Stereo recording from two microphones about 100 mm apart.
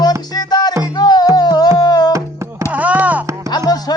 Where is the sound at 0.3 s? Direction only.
45° left (ahead or behind).